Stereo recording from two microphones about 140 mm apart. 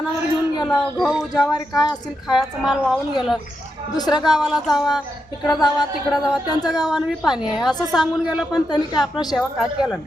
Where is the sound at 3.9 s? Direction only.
30° left (ahead or behind).